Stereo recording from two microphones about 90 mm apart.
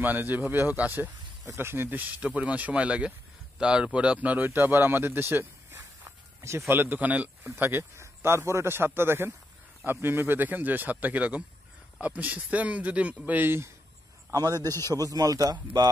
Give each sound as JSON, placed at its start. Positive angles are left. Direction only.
{"t": 0.0, "sound": "speech", "side_deg": -20}
{"t": 4.5, "sound": "a sound", "side_deg": -20}
{"t": 6.7, "sound": "speech", "side_deg": -20}
{"t": 14.3, "sound": "a man's voice", "side_deg": -45}